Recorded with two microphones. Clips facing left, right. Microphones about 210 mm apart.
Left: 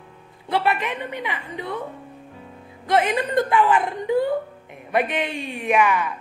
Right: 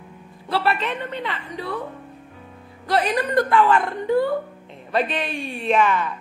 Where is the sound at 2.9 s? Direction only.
20° left (ahead or behind).